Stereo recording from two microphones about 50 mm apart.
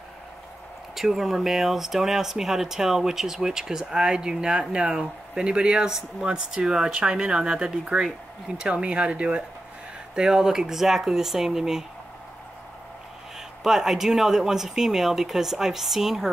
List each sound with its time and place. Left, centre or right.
0.9 s speech: centre
13.7 s speech: centre